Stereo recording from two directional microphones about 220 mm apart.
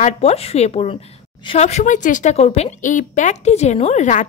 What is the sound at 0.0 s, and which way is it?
Speech, 30° left (ahead or behind).